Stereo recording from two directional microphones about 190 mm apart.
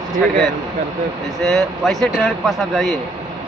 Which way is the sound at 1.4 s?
Centre (ahead or behind).